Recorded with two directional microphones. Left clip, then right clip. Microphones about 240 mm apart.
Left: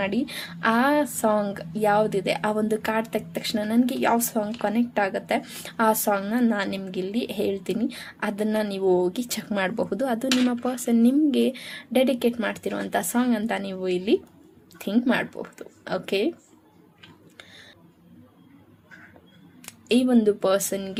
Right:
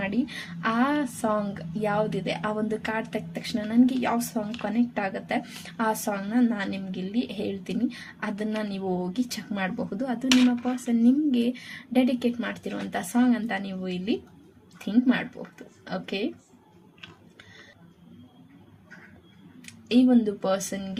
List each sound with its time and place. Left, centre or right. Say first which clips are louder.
0.0 s a woman's voice: left 3 dB; left
19.9 s speech: left 2 dB; left